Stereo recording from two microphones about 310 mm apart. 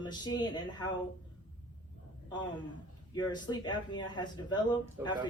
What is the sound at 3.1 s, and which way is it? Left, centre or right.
A woman's voice, centre.